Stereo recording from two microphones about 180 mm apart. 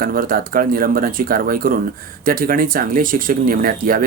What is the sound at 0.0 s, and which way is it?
Speech, 50° right (ahead or behind).